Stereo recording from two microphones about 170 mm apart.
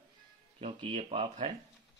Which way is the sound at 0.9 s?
35° right (ahead or behind).